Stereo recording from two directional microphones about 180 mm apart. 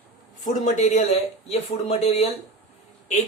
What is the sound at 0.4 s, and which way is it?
Speech, 40° left (ahead or behind).